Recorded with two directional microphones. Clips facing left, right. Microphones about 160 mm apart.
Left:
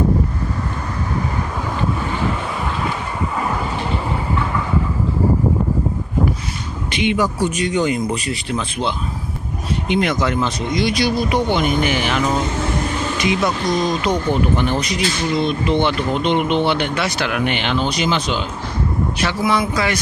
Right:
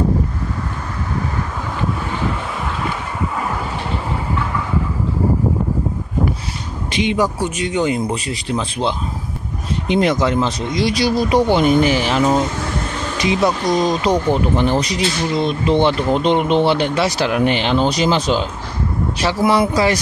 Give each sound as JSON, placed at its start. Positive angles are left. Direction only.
{"t": 7.0, "sound": "speech", "side_deg": -30}